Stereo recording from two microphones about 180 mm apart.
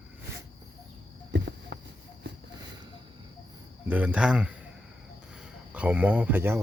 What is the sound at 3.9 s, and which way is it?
Speech, 10° right (ahead or behind).